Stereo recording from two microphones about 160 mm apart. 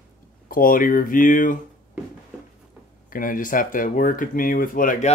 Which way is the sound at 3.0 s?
60° left (ahead or behind).